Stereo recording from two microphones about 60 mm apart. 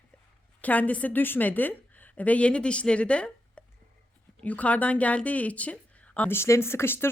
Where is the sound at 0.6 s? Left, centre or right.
Left.